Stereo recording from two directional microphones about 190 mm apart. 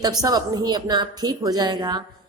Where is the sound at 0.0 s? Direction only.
20° right (ahead or behind).